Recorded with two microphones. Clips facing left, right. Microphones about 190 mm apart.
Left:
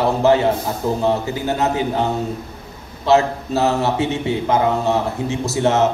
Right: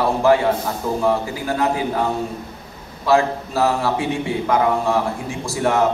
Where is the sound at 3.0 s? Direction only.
20° left (ahead or behind).